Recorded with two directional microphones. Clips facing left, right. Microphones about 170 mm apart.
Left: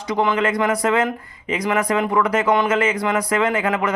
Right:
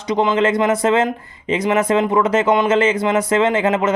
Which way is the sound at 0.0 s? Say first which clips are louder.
Right 3 dB; 20° right (ahead or behind).